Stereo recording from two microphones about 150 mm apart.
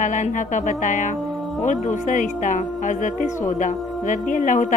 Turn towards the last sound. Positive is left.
turn(degrees=60)  # may be behind; listen again after turning